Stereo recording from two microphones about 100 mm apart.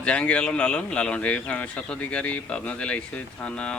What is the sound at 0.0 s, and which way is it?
Speech, 10° left (ahead or behind).